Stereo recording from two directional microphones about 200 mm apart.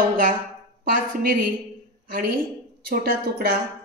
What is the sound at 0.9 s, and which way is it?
A woman's voice, 45° right (ahead or behind).